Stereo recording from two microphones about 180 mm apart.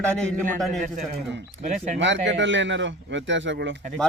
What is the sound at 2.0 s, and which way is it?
A man's voice, 90° right.